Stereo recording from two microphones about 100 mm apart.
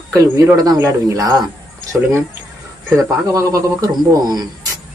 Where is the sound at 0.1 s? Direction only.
35° right (ahead or behind).